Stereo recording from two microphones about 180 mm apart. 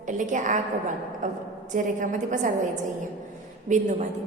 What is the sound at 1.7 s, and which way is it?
Speech, 45° right (ahead or behind).